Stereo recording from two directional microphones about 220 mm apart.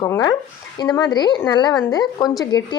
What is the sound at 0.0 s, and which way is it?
A woman's voice, 15° left (ahead or behind).